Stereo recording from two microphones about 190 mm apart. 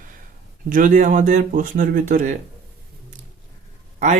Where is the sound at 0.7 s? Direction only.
45° right (ahead or behind).